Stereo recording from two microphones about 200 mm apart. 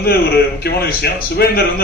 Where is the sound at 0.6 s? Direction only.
50° left (ahead or behind).